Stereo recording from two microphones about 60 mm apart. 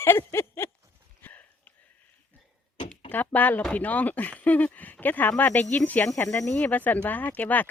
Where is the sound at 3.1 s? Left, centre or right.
Left.